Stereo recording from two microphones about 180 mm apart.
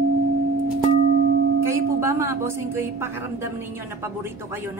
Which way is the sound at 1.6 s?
15° right (ahead or behind).